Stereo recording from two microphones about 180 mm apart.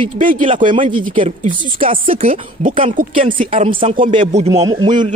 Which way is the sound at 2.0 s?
50° right (ahead or behind).